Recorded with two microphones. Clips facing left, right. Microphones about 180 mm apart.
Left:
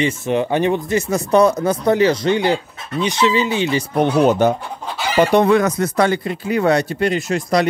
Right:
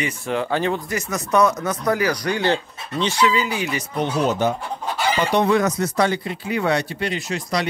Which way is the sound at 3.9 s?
60° left (ahead or behind).